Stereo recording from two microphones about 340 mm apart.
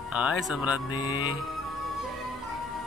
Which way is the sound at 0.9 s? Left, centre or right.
Centre.